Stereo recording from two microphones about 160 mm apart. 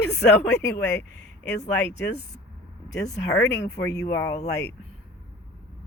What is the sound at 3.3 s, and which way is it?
Speech, 90° left.